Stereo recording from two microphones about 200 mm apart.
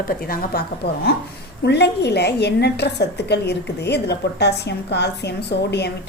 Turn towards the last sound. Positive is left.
turn(degrees=55)  # may be behind; listen again after turning